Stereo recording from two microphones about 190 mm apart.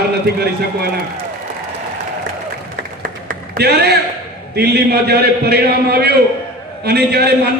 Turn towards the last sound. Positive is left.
turn(degrees=-55)  # may be behind; listen again after turning